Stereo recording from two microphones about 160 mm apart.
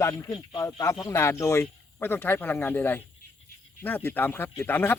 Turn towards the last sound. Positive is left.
turn(degrees=15)  # may be behind; listen again after turning